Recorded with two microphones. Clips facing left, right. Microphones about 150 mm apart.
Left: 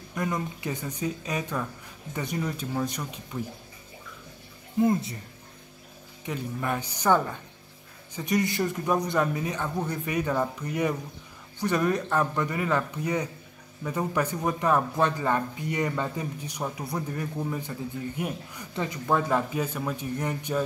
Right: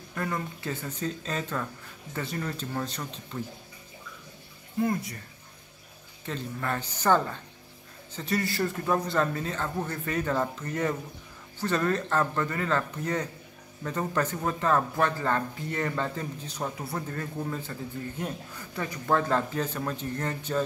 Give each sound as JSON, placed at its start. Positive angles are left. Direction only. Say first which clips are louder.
{"t": 0.1, "sound": "speech", "louder": "left 2 dB", "side_deg": 15}
{"t": 4.7, "sound": "speech", "louder": "left 4 dB", "side_deg": 20}
{"t": 6.2, "sound": "speech", "louder": "left 2 dB", "side_deg": 15}